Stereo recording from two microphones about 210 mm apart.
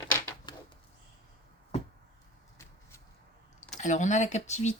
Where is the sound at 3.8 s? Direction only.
35° left (ahead or behind).